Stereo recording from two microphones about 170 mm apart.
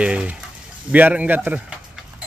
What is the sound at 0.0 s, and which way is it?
Speech, 5° right (ahead or behind).